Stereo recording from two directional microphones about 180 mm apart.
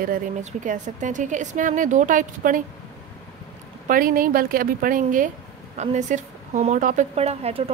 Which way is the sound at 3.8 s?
50° right (ahead or behind).